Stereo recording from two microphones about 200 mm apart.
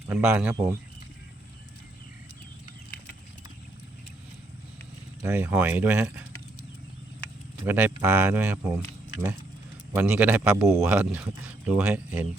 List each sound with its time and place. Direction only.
0.1 s speech: 5° right (ahead or behind)
5.2 s speech: 10° right (ahead or behind)
7.6 s speech: 10° right (ahead or behind)
9.9 s speech: 10° right (ahead or behind)